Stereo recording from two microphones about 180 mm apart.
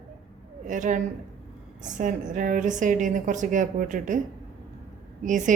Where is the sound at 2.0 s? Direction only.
50° right (ahead or behind).